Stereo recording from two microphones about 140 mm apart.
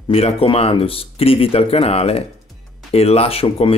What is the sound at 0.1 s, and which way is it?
Speech, 45° left (ahead or behind).